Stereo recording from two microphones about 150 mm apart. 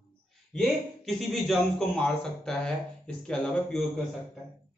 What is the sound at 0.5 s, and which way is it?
A man's voice, centre (ahead or behind).